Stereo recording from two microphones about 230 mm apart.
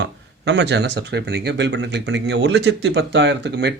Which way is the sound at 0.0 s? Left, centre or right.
Right.